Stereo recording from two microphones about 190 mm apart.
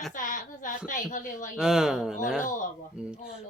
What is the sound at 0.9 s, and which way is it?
Speech, 45° left (ahead or behind).